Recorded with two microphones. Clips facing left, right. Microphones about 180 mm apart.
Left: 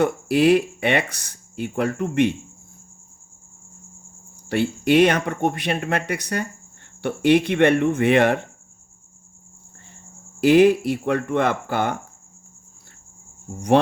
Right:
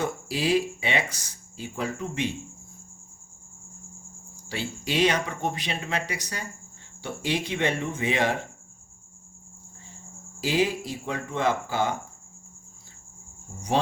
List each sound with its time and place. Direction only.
0.0 s speech: 60° left (ahead or behind)
4.4 s speech: 60° left (ahead or behind)
10.4 s speech: 60° left (ahead or behind)